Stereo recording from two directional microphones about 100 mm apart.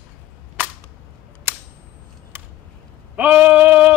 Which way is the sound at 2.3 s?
20° right (ahead or behind).